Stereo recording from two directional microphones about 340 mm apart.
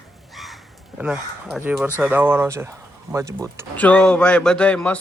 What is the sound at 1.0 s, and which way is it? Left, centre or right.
A man's voice, centre.